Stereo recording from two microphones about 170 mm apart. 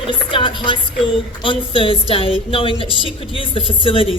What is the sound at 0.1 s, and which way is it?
Music, 30° left (ahead or behind).